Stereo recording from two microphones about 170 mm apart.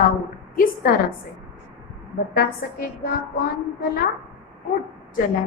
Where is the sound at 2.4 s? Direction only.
60° left (ahead or behind).